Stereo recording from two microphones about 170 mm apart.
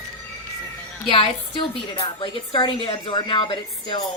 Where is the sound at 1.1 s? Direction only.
30° left (ahead or behind).